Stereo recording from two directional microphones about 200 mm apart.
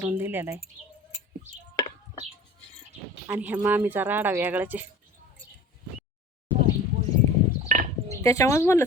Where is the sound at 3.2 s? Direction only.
5° right (ahead or behind).